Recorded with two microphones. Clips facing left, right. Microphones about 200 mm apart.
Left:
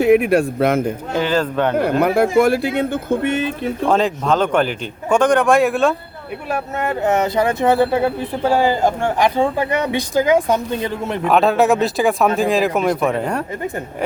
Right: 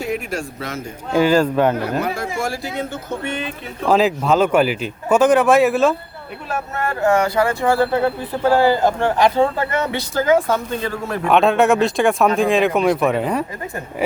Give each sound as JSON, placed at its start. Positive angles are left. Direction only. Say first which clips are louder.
{"t": 0.0, "sound": "speech", "louder": "left 11 dB", "side_deg": 60}
{"t": 1.1, "sound": "speech", "louder": "right 5 dB", "side_deg": -10}
{"t": 1.7, "sound": "speech", "louder": "left 6 dB", "side_deg": 55}
{"t": 3.8, "sound": "speech", "louder": "right 2 dB", "side_deg": -5}
{"t": 6.7, "sound": "speech", "louder": "right 1 dB", "side_deg": 20}
{"t": 11.3, "sound": "speech", "louder": "even", "side_deg": 0}